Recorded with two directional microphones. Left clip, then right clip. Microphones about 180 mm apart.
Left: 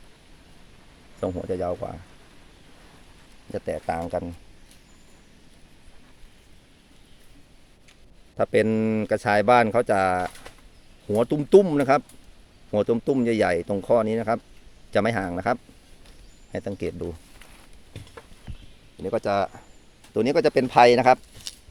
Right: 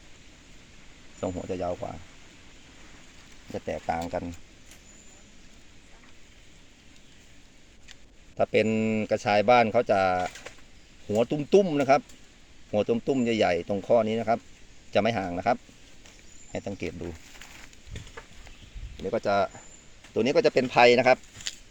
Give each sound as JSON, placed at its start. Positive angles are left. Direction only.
{"t": 1.2, "sound": "speech", "side_deg": 20}
{"t": 3.5, "sound": "speech", "side_deg": 20}
{"t": 8.4, "sound": "speech", "side_deg": 25}
{"t": 18.9, "sound": "speech", "side_deg": 20}